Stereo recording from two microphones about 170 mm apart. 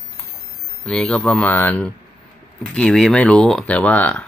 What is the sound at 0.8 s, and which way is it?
Speech, 5° left (ahead or behind).